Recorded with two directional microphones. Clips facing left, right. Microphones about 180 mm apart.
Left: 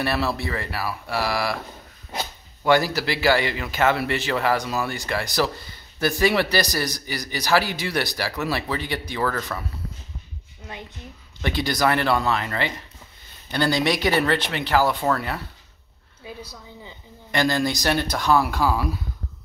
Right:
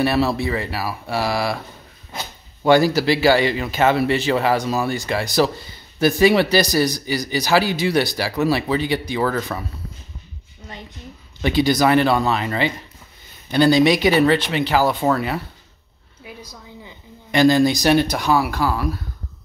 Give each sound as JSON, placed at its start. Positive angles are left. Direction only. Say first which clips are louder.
{"t": 0.0, "sound": "speech", "louder": "right 6 dB", "side_deg": -15}
{"t": 2.6, "sound": "speech", "louder": "right 5 dB", "side_deg": -25}
{"t": 11.4, "sound": "speech", "louder": "right 6 dB", "side_deg": -15}
{"t": 16.8, "sound": "speech", "louder": "right 1 dB", "side_deg": -20}